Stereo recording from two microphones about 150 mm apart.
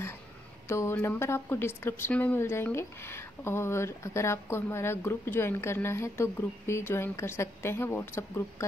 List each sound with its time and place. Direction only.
0.7 s a woman's voice: 15° left (ahead or behind)